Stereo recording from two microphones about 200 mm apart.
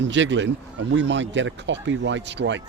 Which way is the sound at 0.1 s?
65° right (ahead or behind).